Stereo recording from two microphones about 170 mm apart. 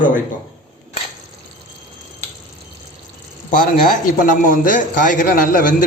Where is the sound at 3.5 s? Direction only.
50° left (ahead or behind).